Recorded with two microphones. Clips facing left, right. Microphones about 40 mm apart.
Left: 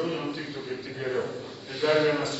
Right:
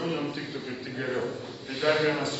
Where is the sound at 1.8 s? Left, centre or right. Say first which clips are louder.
Left 2 dB; right.